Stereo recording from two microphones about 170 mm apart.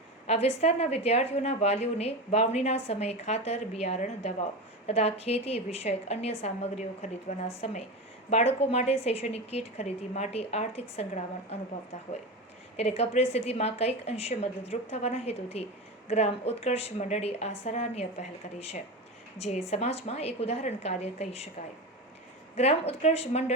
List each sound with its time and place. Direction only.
0.3 s a woman's voice: 35° left (ahead or behind)
12.7 s a woman's voice: 40° left (ahead or behind)
22.5 s a woman's voice: 40° left (ahead or behind)